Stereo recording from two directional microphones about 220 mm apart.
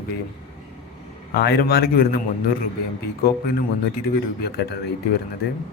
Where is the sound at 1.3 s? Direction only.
45° left (ahead or behind).